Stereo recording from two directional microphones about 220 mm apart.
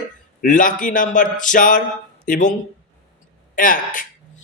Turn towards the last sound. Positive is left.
turn(degrees=35)  # may be behind; listen again after turning